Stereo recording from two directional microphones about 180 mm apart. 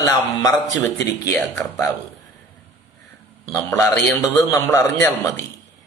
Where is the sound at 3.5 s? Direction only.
15° left (ahead or behind).